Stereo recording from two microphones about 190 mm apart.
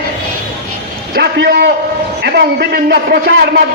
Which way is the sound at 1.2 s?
55° right (ahead or behind).